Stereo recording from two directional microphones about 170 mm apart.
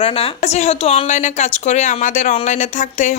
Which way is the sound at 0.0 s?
35° left (ahead or behind).